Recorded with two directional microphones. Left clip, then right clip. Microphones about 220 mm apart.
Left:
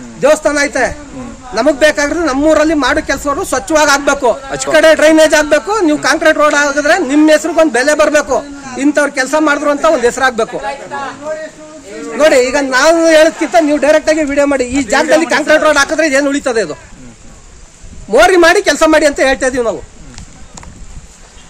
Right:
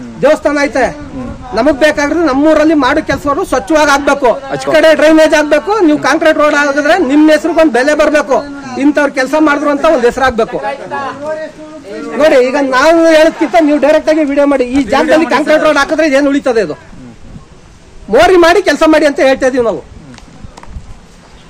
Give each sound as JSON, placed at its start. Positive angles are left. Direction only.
{"t": 0.2, "sound": "a man's voice", "side_deg": 10}
{"t": 10.5, "sound": "speech", "side_deg": -15}
{"t": 12.2, "sound": "a man's voice", "side_deg": 10}
{"t": 18.1, "sound": "a man's voice", "side_deg": 10}